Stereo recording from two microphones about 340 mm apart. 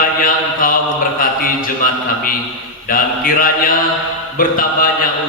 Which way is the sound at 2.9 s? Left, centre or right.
Left.